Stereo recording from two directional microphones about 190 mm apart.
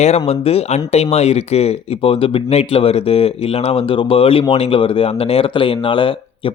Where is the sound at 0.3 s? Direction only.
30° left (ahead or behind).